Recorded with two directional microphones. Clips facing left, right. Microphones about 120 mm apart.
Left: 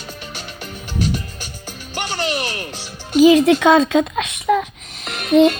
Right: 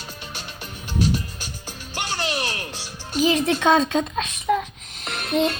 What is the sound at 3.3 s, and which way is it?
Music, 90° left.